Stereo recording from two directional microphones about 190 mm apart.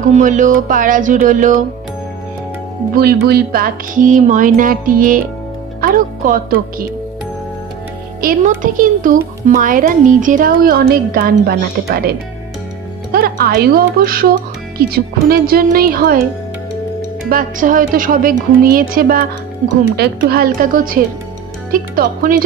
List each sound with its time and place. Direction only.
0.1 s a child's voice: 40° right (ahead or behind)
3.2 s a child's voice: 55° right (ahead or behind)
8.2 s a child's voice: 45° right (ahead or behind)
17.3 s a child's voice: 45° right (ahead or behind)